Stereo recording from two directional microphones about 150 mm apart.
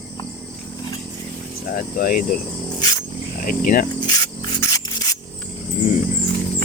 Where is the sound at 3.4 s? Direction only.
65° left (ahead or behind).